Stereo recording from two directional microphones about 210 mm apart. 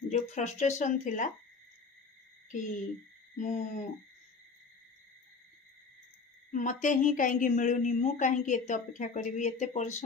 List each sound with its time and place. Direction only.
0.1 s a woman's voice: 35° left (ahead or behind)
2.5 s a woman's voice: 35° left (ahead or behind)
6.5 s a woman's voice: 35° left (ahead or behind)